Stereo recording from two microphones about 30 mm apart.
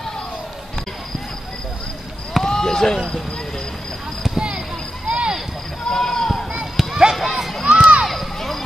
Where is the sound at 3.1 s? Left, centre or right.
Left.